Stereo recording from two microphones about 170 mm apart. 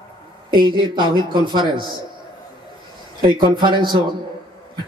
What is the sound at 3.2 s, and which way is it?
Speech, 30° right (ahead or behind).